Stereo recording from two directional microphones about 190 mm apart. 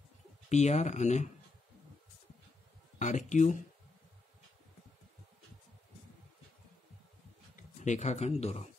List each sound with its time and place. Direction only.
0.5 s speech: 35° left (ahead or behind)
3.0 s speech: 40° left (ahead or behind)
7.5 s speech: 40° left (ahead or behind)